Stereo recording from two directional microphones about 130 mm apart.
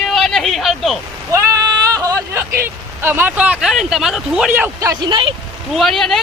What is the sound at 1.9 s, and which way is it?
Speech, 25° right (ahead or behind).